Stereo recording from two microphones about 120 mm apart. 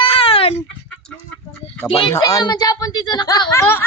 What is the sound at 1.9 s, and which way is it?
Speech, 50° left (ahead or behind).